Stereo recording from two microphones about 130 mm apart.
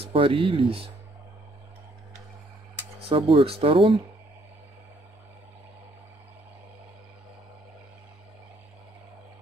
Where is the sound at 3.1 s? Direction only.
45° right (ahead or behind).